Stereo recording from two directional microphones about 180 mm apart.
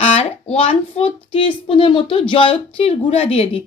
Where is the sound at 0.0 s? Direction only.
35° left (ahead or behind).